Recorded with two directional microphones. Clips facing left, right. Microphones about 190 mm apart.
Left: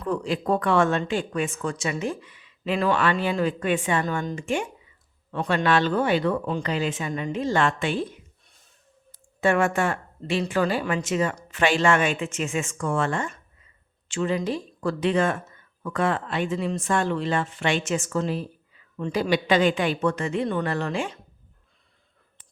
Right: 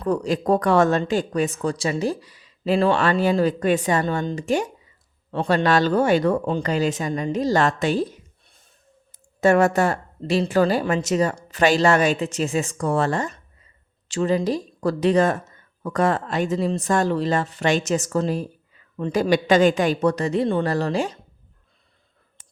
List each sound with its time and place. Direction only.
0.0 s speech: 40° right (ahead or behind)
9.4 s speech: 40° right (ahead or behind)